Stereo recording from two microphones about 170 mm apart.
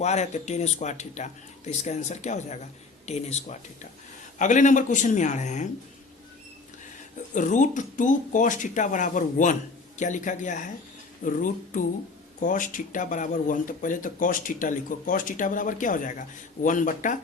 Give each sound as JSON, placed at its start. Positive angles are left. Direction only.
{"t": 0.0, "sound": "speech", "side_deg": 40}
{"t": 7.3, "sound": "speech", "side_deg": 45}